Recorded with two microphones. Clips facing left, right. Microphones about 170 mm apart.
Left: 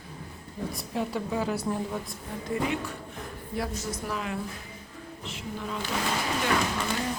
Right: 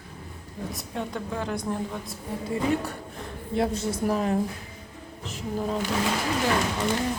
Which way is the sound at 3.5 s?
25° right (ahead or behind).